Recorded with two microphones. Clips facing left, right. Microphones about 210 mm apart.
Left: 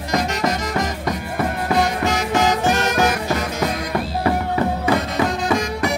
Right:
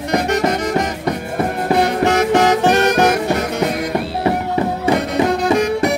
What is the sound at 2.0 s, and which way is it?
Music, 65° right (ahead or behind).